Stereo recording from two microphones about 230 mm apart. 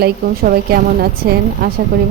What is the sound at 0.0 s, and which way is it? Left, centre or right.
A woman's voice, right.